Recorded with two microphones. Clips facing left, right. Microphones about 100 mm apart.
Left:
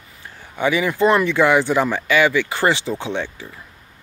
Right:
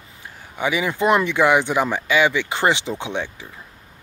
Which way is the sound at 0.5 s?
15° right (ahead or behind).